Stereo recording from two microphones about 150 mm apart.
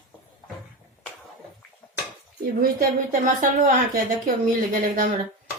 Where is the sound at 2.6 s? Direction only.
65° right (ahead or behind).